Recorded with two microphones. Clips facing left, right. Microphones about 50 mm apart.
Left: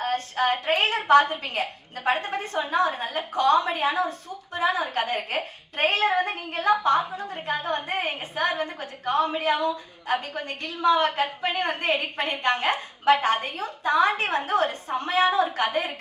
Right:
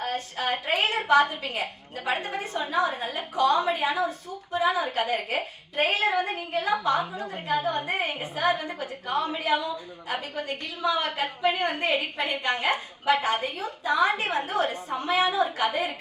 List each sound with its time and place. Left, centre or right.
0.0 s a woman's voice: left